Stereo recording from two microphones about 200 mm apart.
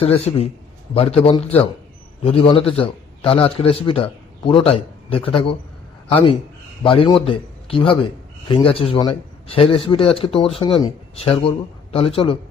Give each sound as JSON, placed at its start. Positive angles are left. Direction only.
{"t": 0.0, "sound": "a man's voice", "side_deg": 30}